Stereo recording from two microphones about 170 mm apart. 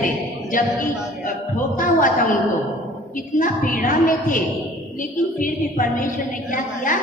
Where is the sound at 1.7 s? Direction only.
50° left (ahead or behind).